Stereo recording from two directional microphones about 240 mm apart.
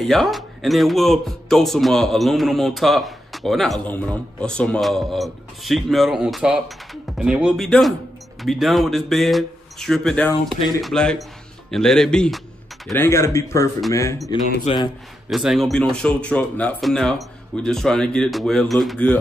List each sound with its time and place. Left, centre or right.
0.1 s a man's voice: centre; by 14.9 s left
15.2 s a man's voice: centre